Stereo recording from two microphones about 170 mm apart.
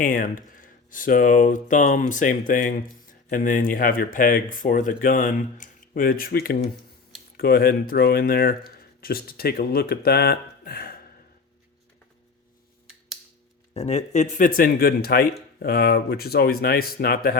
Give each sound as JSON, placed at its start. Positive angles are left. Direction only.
{"t": 0.0, "sound": "speech", "side_deg": 55}
{"t": 13.7, "sound": "speech", "side_deg": 40}